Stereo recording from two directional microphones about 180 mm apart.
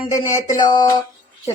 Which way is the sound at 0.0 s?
20° left (ahead or behind).